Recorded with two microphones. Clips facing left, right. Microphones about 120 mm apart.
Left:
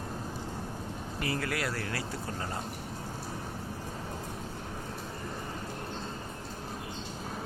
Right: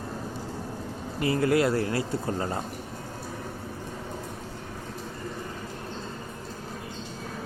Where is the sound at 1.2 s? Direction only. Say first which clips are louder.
Right 10 dB; 25° right (ahead or behind).